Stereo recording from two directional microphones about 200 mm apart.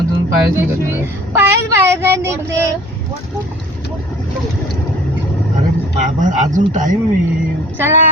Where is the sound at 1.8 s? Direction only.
15° right (ahead or behind).